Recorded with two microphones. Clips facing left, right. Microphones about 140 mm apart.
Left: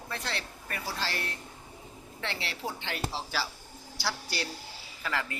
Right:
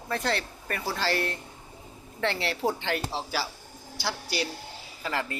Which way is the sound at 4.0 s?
20° right (ahead or behind).